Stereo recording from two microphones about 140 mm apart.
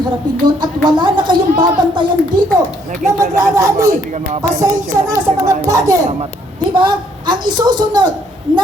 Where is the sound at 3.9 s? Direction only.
55° right (ahead or behind).